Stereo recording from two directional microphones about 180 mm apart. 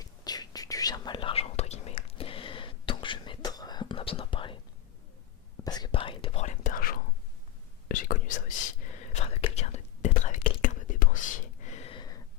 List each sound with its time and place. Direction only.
0.0 s whispering: 20° left (ahead or behind)
5.6 s whispering: 20° left (ahead or behind)